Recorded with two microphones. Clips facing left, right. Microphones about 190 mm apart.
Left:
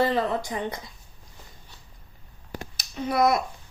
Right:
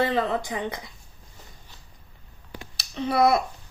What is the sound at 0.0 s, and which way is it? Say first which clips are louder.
Speech: even; 50° left (ahead or behind).